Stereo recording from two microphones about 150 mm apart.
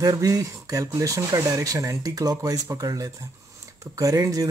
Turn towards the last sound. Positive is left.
turn(degrees=-25)  # may be behind; listen again after turning